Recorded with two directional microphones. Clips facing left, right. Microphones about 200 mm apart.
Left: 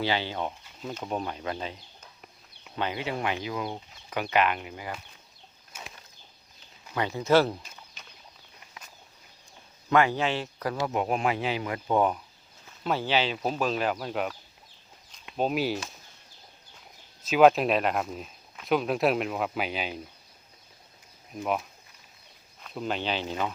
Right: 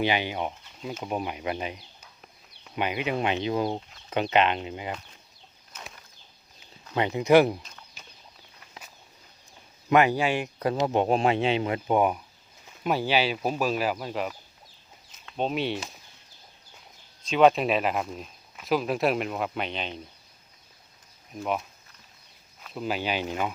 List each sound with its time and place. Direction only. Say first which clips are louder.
0.0 s speech: right 2 dB; 15° right (ahead or behind)
5.7 s bird flight: even; 10° left (ahead or behind)
6.9 s speech: right 3 dB; 20° right (ahead or behind)
9.9 s speech: right 2 dB; 15° right (ahead or behind)
15.4 s speech: left 1 dB; 5° left (ahead or behind)
17.2 s speech: left 1 dB; 5° left (ahead or behind)
21.3 s speech: even; centre (ahead or behind)